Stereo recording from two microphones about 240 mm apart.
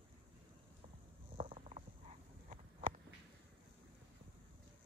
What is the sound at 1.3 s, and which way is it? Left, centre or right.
Stomach rumble, right.